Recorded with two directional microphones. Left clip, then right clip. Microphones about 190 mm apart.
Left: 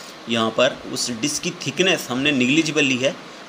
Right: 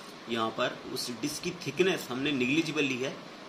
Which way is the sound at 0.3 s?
55° left (ahead or behind).